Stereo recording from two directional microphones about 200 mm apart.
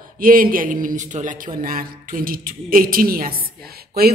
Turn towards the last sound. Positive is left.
turn(degrees=-50)  # may be behind; listen again after turning